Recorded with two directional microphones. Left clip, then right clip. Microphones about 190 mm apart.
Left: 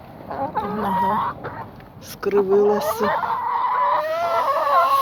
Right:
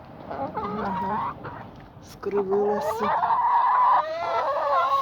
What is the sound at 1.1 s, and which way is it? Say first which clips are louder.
Chicken: left 6 dB; 15° left (ahead or behind).